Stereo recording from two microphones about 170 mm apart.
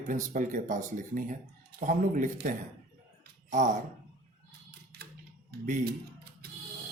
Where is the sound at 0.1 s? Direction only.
50° right (ahead or behind).